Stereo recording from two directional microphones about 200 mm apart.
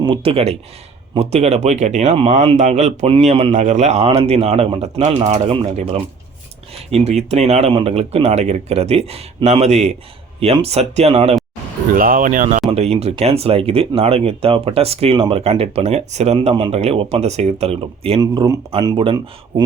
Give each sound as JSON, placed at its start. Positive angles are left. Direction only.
{"t": 0.0, "sound": "speech", "side_deg": -25}
{"t": 11.9, "sound": "speech", "side_deg": -45}